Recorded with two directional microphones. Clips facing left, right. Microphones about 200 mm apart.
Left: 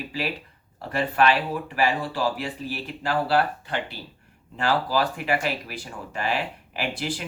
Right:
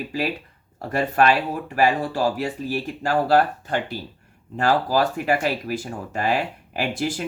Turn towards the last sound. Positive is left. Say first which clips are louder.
# right 4 dB
turn(degrees=-45)  # may be behind; listen again after turning